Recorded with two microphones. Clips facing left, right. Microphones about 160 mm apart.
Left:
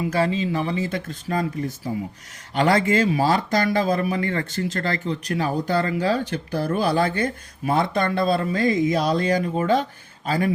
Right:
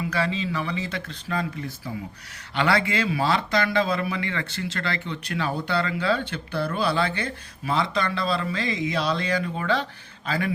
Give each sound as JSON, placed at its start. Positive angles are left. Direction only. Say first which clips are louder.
{"t": 0.0, "sound": "speech", "louder": "left 4 dB", "side_deg": 45}